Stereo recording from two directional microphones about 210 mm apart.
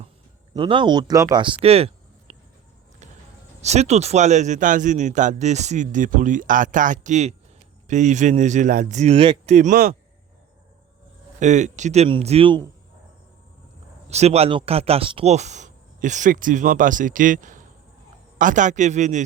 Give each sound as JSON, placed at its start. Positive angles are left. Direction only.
{"t": 0.5, "sound": "speech", "side_deg": -25}
{"t": 3.6, "sound": "speech", "side_deg": -30}
{"t": 9.6, "sound": "speech", "side_deg": -40}
{"t": 11.3, "sound": "speech", "side_deg": -35}
{"t": 14.1, "sound": "speech", "side_deg": -30}